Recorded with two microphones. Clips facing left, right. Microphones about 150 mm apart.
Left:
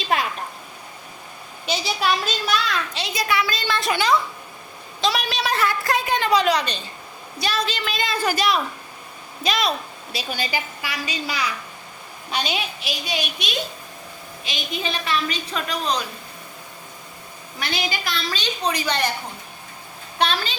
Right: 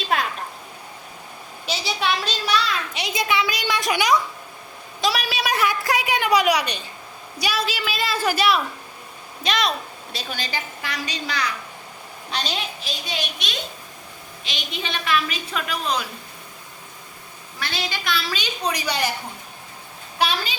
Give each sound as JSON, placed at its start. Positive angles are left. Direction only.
{"t": 1.6, "sound": "a child's voice", "side_deg": 0}
{"t": 2.9, "sound": "a woman's voice", "side_deg": -20}
{"t": 14.5, "sound": "a woman's voice", "side_deg": 40}
{"t": 18.0, "sound": "a woman's voice", "side_deg": -5}
{"t": 20.1, "sound": "a woman's voice", "side_deg": -10}